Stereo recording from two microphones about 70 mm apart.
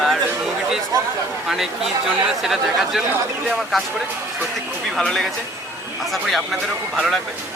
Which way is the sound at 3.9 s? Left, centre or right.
Centre.